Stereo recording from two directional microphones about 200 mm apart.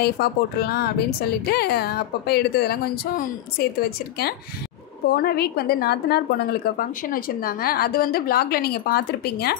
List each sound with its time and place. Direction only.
0.0 s a woman's voice: 50° left (ahead or behind)
5.0 s a woman's voice: 50° left (ahead or behind)